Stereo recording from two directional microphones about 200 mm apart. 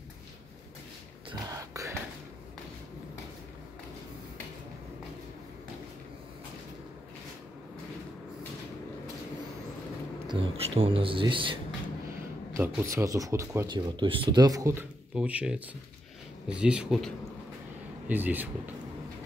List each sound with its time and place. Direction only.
1.7 s a sound: 15° right (ahead or behind)
10.2 s speech: 25° right (ahead or behind)
12.5 s speech: 15° right (ahead or behind)